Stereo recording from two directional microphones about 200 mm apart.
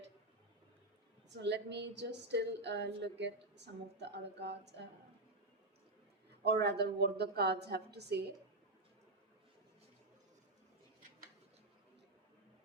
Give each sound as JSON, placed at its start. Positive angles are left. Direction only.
{"t": 1.3, "sound": "a woman's voice", "side_deg": -60}
{"t": 6.4, "sound": "a woman's voice", "side_deg": -55}